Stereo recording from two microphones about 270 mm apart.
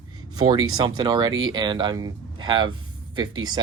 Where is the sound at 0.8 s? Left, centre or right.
Centre.